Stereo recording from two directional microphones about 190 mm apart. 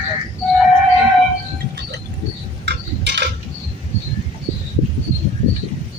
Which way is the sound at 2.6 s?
65° right (ahead or behind).